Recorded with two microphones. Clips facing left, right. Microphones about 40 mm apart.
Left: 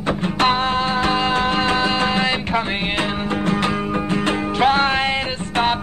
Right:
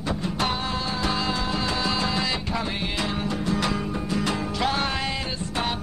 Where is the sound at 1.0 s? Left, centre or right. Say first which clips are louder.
Left 8 dB; left.